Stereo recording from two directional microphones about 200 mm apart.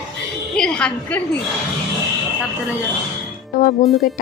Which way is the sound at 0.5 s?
5° left (ahead or behind).